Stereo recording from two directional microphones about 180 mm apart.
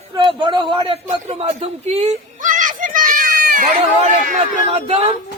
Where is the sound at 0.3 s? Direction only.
25° right (ahead or behind); by 3.7 s 50° right (ahead or behind).